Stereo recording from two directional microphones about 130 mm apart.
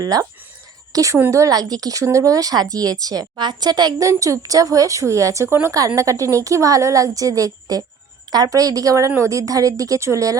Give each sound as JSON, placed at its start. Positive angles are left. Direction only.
{"t": 0.0, "sound": "speech", "side_deg": -30}